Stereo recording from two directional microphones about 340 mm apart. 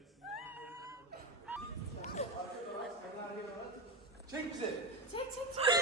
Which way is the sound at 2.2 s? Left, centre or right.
Centre.